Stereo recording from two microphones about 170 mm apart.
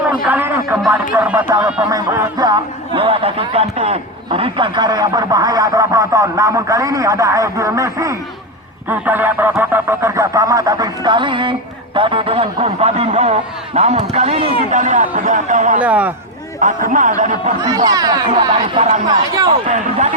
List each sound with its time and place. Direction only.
0.3 s speech: 10° right (ahead or behind)
1.9 s a man's voice: 20° right (ahead or behind); by 14.5 s 35° right (ahead or behind)
14.7 s speech: 50° right (ahead or behind)
15.8 s speech: 10° right (ahead or behind)
16.6 s speech: 50° right (ahead or behind)
17.6 s speech: 20° right (ahead or behind)
19.6 s speech: 45° right (ahead or behind)